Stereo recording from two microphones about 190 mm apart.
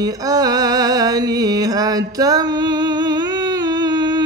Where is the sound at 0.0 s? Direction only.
20° right (ahead or behind).